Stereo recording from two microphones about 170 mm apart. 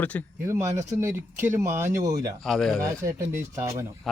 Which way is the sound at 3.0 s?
15° right (ahead or behind).